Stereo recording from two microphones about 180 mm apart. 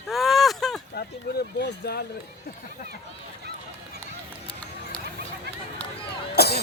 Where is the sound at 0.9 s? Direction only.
60° left (ahead or behind).